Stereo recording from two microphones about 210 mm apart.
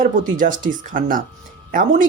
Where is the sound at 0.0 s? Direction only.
40° right (ahead or behind).